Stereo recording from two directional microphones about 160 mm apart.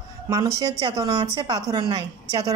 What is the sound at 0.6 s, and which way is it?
A woman's voice, 30° right (ahead or behind).